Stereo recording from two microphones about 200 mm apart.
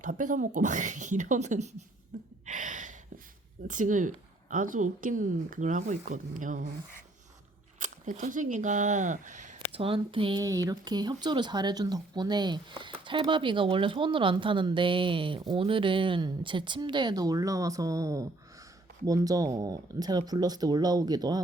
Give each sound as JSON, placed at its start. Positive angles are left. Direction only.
{"t": 0.0, "sound": "a woman's voice", "side_deg": -40}
{"t": 2.1, "sound": "gasp", "side_deg": -35}
{"t": 2.5, "sound": "a sound", "side_deg": -40}
{"t": 3.7, "sound": "a woman's voice", "side_deg": -40}
{"t": 7.8, "sound": "speech", "side_deg": -40}